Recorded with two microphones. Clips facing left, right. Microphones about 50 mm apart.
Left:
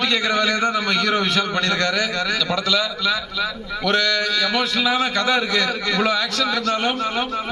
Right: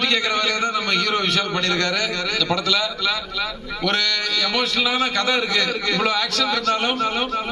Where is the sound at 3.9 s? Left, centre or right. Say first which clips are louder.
Left 4 dB; centre.